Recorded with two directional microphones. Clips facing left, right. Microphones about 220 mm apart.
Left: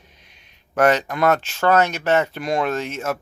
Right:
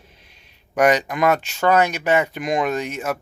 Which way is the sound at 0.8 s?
15° right (ahead or behind).